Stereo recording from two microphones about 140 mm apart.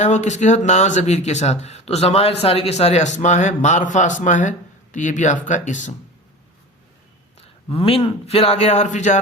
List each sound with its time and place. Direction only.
0.0 s speech: 55° left (ahead or behind)
7.7 s a man's voice: 40° left (ahead or behind); by 9.2 s 60° left (ahead or behind)